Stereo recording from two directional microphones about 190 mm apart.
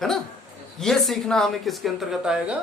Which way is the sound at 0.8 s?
Centre (ahead or behind).